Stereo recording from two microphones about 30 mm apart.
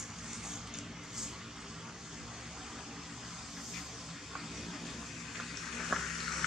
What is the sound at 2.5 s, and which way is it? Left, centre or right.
Vehicle, centre.